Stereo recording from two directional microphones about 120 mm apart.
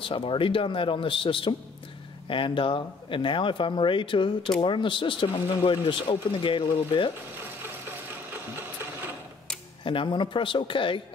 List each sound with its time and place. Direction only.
0.0 s speech: 45° left (ahead or behind)
8.3 s sewing machine: 15° right (ahead or behind)
9.8 s speech: 45° left (ahead or behind)